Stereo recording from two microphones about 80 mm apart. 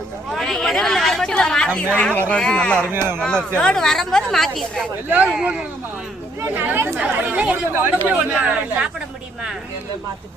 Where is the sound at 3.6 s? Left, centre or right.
Centre.